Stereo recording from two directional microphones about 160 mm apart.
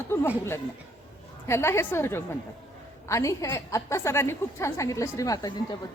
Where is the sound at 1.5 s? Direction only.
15° left (ahead or behind).